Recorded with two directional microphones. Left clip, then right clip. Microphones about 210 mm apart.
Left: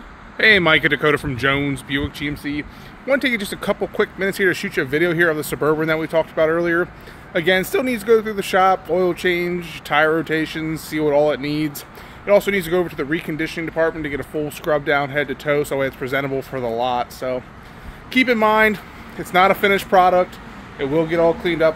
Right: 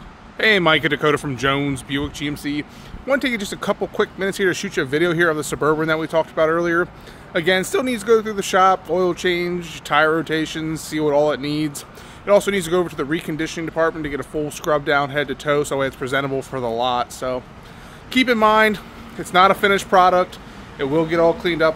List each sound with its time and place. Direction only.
0.4 s speech: 5° right (ahead or behind)
3.1 s speech: centre (ahead or behind)